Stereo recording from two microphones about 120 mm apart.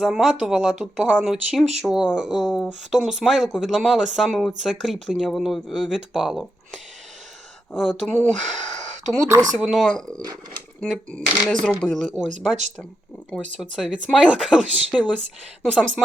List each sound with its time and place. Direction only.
0.0 s speech: 5° right (ahead or behind)
7.8 s speech: centre (ahead or behind)
8.3 s speech: 85° right
9.6 s speech: 5° right (ahead or behind)
13.6 s speech: 5° right (ahead or behind)
15.6 s speech: 5° left (ahead or behind)